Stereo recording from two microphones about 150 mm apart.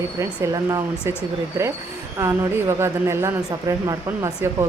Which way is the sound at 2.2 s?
15° right (ahead or behind).